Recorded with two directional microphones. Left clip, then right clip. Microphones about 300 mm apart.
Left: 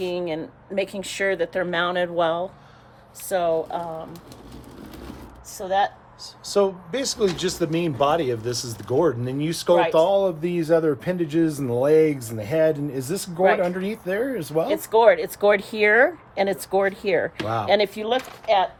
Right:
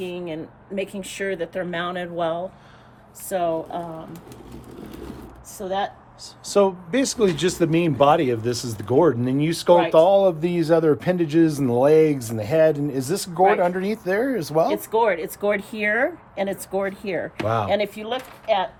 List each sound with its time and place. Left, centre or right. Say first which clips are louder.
0.0 s speech: left 4 dB; left
5.5 s speech: left 4 dB; left
6.2 s a man's voice: right 2 dB; right
14.7 s speech: left 4 dB; left